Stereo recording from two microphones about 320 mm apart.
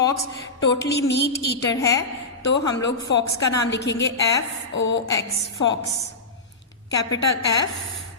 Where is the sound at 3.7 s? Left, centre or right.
Left.